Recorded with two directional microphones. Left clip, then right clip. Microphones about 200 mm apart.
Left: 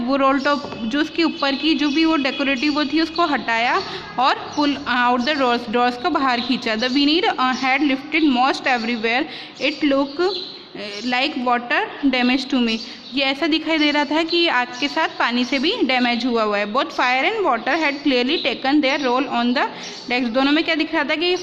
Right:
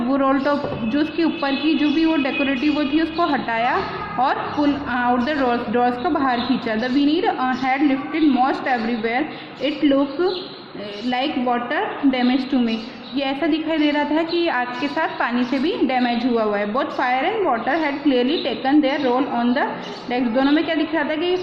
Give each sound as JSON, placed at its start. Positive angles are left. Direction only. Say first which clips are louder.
{"t": 0.1, "sound": "a man's voice", "louder": "left 2 dB", "side_deg": 45}